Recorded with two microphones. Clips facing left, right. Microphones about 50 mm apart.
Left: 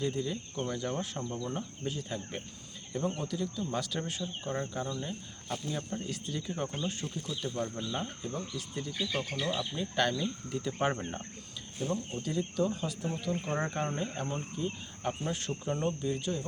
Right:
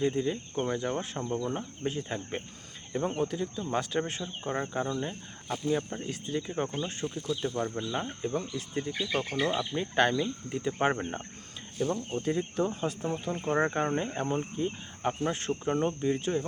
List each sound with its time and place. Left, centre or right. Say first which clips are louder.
0.0 s speech: right 5 dB; right
1.8 s speech: right 4 dB; right
7.1 s speech: right 6 dB; centre
7.4 s speech: right 1 dB; right
11.9 s speech: right 3 dB; right
13.5 s speech: right 9 dB; right